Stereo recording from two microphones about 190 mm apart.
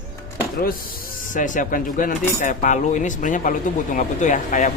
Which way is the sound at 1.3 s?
40° left (ahead or behind).